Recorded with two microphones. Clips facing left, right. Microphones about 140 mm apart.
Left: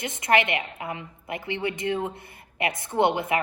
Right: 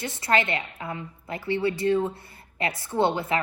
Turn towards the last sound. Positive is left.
turn(degrees=20)  # may be behind; listen again after turning